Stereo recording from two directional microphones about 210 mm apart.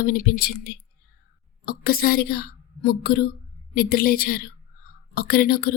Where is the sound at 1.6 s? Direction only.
45° left (ahead or behind).